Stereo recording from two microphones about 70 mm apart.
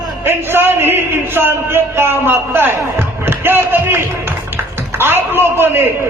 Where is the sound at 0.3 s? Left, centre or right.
Right.